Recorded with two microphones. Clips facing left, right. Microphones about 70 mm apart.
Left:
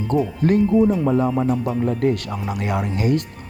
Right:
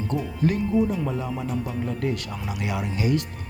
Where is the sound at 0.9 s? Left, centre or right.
Left.